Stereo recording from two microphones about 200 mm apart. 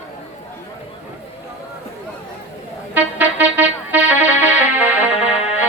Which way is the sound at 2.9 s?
10° right (ahead or behind).